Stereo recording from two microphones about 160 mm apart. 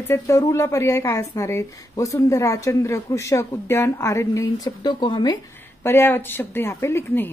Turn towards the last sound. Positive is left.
turn(degrees=15)  # may be behind; listen again after turning